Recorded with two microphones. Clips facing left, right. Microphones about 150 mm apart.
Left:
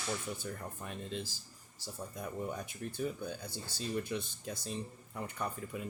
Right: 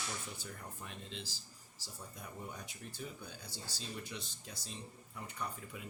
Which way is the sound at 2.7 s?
55° left (ahead or behind).